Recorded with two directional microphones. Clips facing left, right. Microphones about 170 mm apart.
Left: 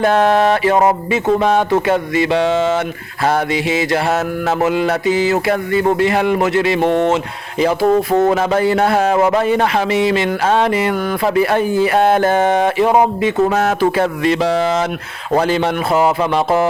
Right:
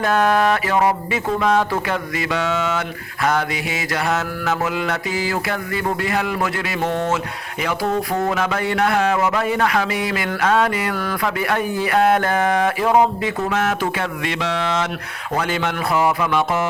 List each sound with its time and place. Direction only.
0.0 s mantra: 30° left (ahead or behind)
7.6 s speech: 30° left (ahead or behind)
8.3 s mantra: 30° left (ahead or behind)
13.5 s speech: 35° left (ahead or behind)